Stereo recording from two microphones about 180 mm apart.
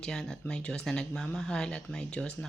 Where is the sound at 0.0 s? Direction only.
5° left (ahead or behind).